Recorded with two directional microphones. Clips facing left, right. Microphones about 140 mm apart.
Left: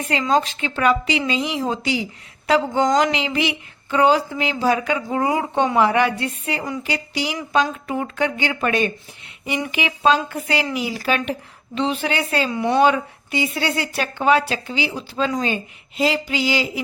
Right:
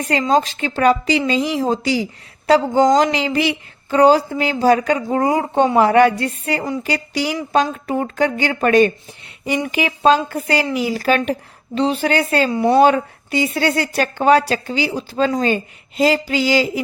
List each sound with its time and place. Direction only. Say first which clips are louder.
0.1 s speech: right 3 dB; 40° right (ahead or behind)